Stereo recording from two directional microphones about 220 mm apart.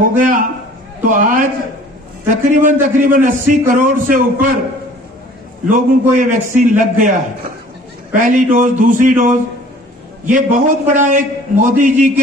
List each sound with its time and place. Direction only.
0.0 s a man's voice: 35° right (ahead or behind)
5.7 s a man's voice: 35° right (ahead or behind)
10.3 s a man's voice: 35° right (ahead or behind)